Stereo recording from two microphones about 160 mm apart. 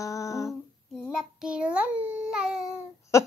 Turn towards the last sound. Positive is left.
turn(degrees=20)  # may be behind; listen again after turning